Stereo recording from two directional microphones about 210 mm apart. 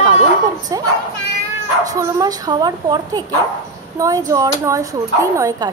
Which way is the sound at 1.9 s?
15° right (ahead or behind).